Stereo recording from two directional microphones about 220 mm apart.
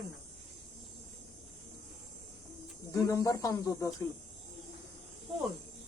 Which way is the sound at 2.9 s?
10° left (ahead or behind).